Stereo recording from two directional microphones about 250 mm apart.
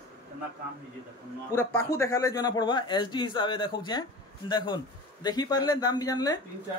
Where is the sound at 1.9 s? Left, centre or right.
Centre.